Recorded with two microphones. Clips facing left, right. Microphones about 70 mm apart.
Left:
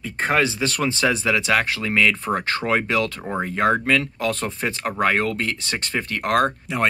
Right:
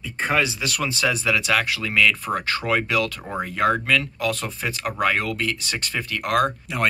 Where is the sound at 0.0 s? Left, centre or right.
Left.